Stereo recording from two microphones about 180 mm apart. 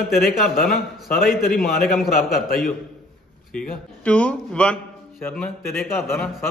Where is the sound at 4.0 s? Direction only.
5° left (ahead or behind).